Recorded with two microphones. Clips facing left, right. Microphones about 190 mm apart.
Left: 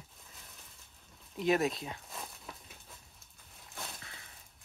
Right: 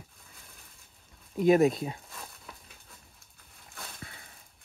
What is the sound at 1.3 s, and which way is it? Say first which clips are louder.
Speech: right 8 dB; 50° right (ahead or behind).